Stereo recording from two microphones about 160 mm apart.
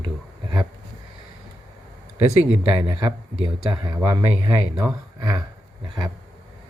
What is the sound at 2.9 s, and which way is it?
Speech, 25° right (ahead or behind).